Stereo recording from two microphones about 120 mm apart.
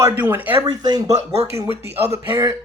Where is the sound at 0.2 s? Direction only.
15° right (ahead or behind).